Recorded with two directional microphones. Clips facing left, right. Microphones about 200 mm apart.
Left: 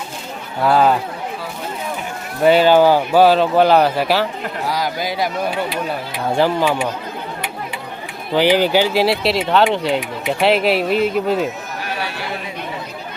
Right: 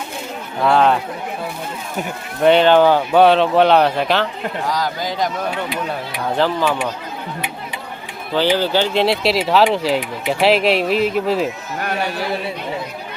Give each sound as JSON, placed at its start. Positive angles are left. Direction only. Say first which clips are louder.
{"t": 0.6, "sound": "speech", "louder": "even", "side_deg": 5}
{"t": 2.4, "sound": "speech", "louder": "even", "side_deg": 5}
{"t": 8.4, "sound": "speech", "louder": "left 2 dB", "side_deg": 15}
{"t": 11.8, "sound": "a sound", "louder": "right 6 dB", "side_deg": -50}